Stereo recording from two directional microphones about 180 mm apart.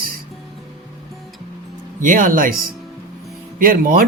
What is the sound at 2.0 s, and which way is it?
Speech, 45° right (ahead or behind).